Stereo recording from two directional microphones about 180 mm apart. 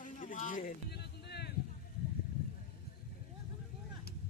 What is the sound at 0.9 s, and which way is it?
Music, 65° left (ahead or behind).